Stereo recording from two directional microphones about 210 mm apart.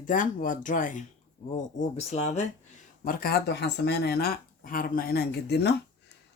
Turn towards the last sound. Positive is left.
turn(degrees=50)  # may be behind; listen again after turning